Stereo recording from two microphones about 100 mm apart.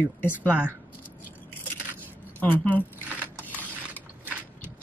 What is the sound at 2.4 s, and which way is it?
Speech, 15° left (ahead or behind).